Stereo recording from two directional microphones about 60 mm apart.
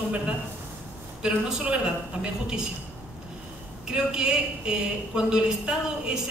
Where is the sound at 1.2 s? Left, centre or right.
Centre.